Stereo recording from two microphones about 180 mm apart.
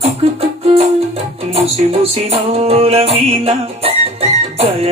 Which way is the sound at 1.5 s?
35° right (ahead or behind).